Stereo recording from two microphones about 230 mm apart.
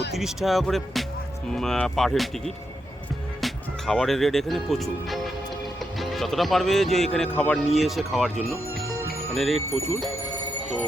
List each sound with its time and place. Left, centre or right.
0.1 s speech: centre
9.3 s speech: centre